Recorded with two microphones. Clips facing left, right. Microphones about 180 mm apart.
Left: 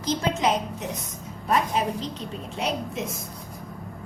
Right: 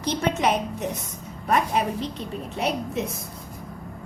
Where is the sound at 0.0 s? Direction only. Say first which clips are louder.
Right 1 dB; 65° right (ahead or behind).